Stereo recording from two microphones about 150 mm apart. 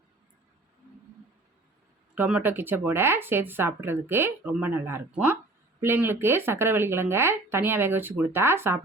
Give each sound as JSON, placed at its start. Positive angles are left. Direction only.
{"t": 2.1, "sound": "speech", "side_deg": -10}